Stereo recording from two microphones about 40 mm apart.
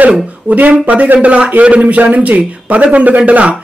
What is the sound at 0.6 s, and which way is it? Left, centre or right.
A man's voice, right.